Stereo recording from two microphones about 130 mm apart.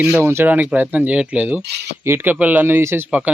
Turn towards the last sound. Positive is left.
turn(degrees=-20)  # may be behind; listen again after turning